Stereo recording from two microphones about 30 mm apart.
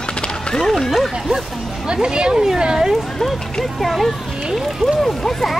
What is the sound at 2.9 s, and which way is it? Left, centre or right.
Speech, centre.